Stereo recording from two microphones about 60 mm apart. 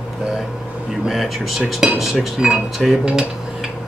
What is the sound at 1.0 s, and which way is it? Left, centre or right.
Speech, centre.